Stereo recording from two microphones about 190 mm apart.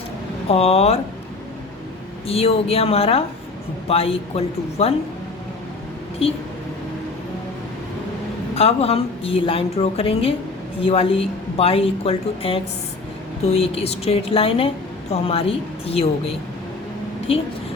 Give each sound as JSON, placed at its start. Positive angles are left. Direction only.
{"t": 0.4, "sound": "speech", "side_deg": 30}
{"t": 2.2, "sound": "speech", "side_deg": 30}
{"t": 8.5, "sound": "speech", "side_deg": 30}